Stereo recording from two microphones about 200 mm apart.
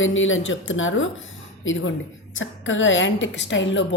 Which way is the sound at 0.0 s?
75° left (ahead or behind).